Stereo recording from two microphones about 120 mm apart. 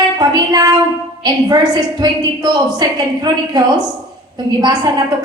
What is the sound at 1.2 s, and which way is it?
A woman's voice, 35° right (ahead or behind).